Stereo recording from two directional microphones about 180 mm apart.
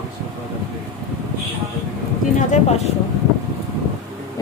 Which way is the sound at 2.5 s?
40° left (ahead or behind).